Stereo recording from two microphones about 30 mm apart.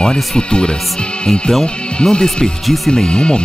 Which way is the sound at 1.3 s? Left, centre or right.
Centre.